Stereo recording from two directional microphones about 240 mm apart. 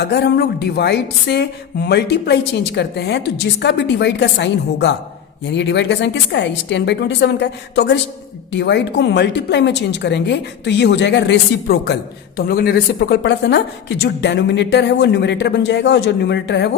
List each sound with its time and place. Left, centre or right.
0.0 s speech: left